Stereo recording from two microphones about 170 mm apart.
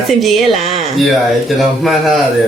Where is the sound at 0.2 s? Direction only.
Centre (ahead or behind).